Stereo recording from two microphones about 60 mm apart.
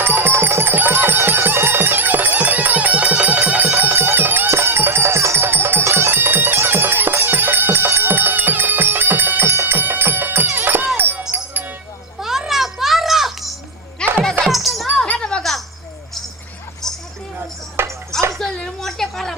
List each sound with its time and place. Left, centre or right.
0.0 s music: right
10.9 s a sound: right
12.2 s music: centre
14.0 s music: centre
14.4 s music: centre
15.0 s music: centre
16.8 s a sound: centre
17.8 s music: right
18.3 s a sound: centre